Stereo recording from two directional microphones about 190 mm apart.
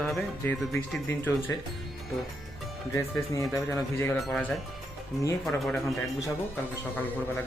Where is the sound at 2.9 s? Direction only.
15° left (ahead or behind).